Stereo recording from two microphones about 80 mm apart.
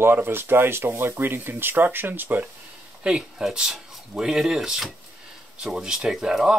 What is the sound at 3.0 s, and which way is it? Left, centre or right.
Speech, centre.